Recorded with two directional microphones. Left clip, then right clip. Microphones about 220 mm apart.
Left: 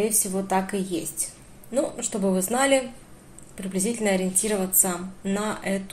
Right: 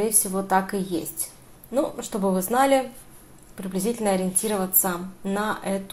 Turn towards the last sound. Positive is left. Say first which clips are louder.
# right 1 dB
turn(degrees=-10)  # may be behind; listen again after turning